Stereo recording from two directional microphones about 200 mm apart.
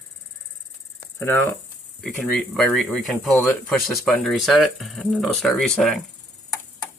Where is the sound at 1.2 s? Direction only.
10° left (ahead or behind).